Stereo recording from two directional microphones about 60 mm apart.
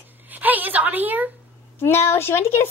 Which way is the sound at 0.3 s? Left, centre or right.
Right.